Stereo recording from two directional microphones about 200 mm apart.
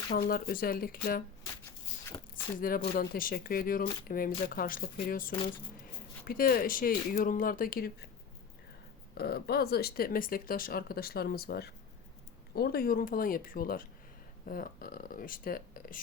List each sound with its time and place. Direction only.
0.1 s speech: 50° left (ahead or behind)
2.6 s speech: 45° left (ahead or behind)
6.2 s speech: 45° left (ahead or behind)
9.1 s speech: 50° left (ahead or behind)